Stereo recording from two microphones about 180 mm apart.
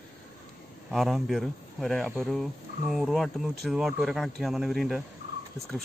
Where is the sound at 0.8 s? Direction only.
Centre (ahead or behind).